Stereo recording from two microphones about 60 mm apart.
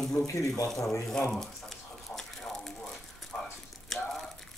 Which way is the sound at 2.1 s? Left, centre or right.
Centre.